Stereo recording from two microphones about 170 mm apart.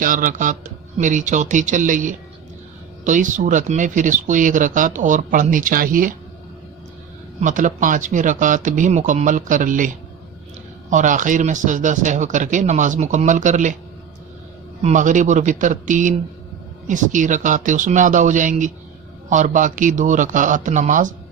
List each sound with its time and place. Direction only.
0.0 s speech: 55° right (ahead or behind)
7.4 s speech: 50° right (ahead or behind)
14.8 s speech: 45° right (ahead or behind)